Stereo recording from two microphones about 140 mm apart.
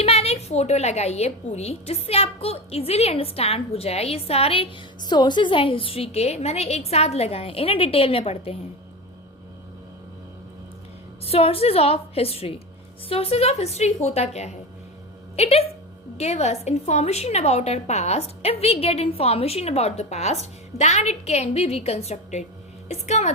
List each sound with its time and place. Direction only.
0.0 s a woman's voice: 45° left (ahead or behind)
11.3 s a woman's voice: 45° left (ahead or behind)